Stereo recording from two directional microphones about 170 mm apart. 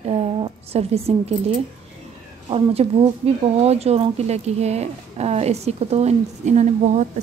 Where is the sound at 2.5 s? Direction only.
35° right (ahead or behind).